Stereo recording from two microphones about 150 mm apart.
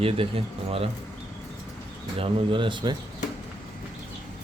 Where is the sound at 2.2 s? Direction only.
35° right (ahead or behind).